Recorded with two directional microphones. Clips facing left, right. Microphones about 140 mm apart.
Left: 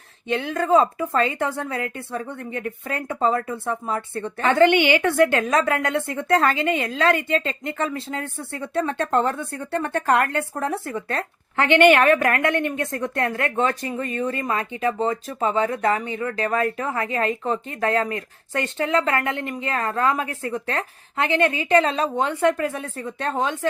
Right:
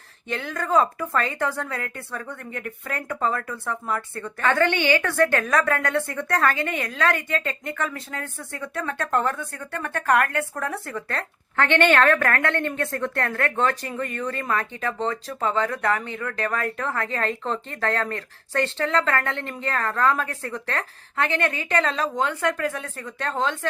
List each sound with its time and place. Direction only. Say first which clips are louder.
0.3 s a woman's voice: left 6 dB; 25° left (ahead or behind)